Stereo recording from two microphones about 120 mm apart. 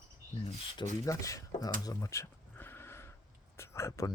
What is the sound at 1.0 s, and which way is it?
Speech, 25° left (ahead or behind).